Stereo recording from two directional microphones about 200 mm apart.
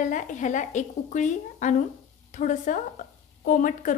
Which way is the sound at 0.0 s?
40° left (ahead or behind).